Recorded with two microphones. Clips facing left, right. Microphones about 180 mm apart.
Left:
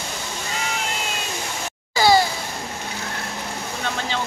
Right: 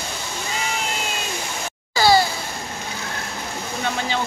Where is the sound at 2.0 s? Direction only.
20° left (ahead or behind).